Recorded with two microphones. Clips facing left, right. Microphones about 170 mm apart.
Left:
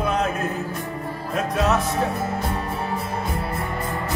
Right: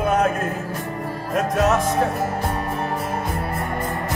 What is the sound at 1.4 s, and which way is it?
Music, 45° right (ahead or behind).